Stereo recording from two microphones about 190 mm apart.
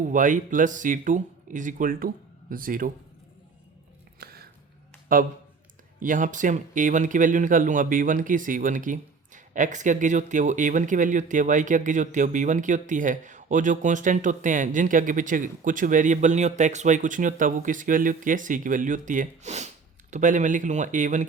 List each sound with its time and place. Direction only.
0.0 s speech: 40° right (ahead or behind)
4.2 s a sound: 55° right (ahead or behind)
5.1 s speech: 45° right (ahead or behind)